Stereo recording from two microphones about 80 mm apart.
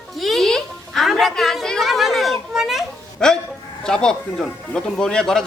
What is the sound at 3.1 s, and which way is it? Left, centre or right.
Speech, centre.